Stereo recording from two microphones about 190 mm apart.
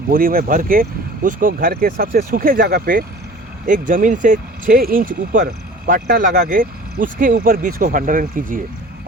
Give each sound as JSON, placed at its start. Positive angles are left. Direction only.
{"t": 0.1, "sound": "speech", "side_deg": -50}